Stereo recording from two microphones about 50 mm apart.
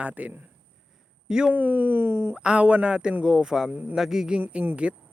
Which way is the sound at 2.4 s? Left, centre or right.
Right.